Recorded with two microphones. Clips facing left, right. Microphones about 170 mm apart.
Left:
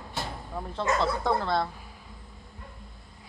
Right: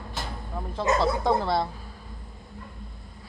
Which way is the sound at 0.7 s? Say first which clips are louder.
Right 3 dB; 15° right (ahead or behind).